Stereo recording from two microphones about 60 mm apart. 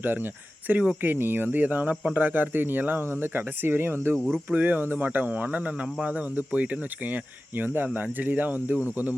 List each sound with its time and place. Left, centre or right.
0.0 s speech: right
4.4 s speech: right